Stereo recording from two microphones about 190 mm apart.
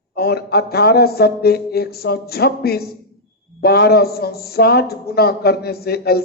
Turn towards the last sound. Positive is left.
turn(degrees=55)  # may be behind; listen again after turning